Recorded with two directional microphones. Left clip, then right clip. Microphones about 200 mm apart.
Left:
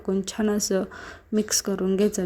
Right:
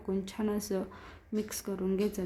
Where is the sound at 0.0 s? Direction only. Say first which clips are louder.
Left 9 dB; 25° left (ahead or behind).